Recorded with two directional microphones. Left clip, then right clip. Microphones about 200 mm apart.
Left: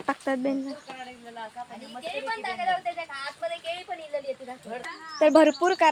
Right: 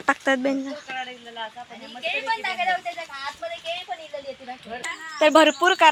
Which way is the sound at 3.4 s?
30° left (ahead or behind).